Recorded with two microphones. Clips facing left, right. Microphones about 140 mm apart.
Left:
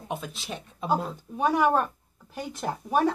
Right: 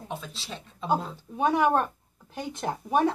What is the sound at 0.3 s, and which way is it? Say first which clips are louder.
Speech: left 3 dB; 15° left (ahead or behind).